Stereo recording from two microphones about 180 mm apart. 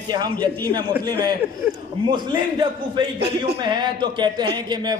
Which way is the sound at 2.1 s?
25° right (ahead or behind).